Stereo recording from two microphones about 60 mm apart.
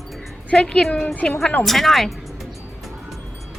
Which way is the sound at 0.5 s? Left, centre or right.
Centre.